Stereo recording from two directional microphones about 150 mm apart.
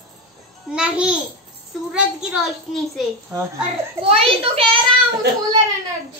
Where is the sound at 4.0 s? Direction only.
40° right (ahead or behind).